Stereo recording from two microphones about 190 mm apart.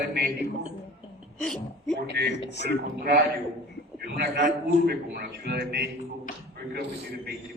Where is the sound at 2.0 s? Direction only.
60° right (ahead or behind).